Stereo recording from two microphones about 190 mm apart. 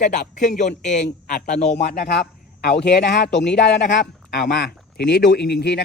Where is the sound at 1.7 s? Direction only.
60° left (ahead or behind).